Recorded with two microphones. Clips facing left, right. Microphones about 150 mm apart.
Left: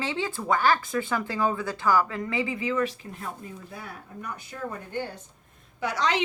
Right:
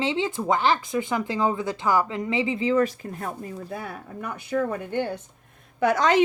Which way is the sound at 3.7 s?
65° right (ahead or behind).